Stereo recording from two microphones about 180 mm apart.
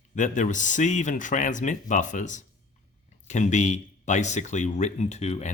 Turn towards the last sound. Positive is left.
turn(degrees=40)  # may be behind; listen again after turning